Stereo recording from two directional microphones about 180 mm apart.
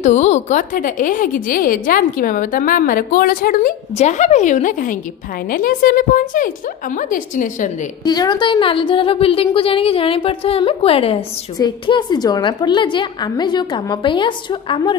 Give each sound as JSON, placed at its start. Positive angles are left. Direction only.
{"t": 0.0, "sound": "a woman's voice", "side_deg": 40}
{"t": 8.0, "sound": "a woman's voice", "side_deg": 25}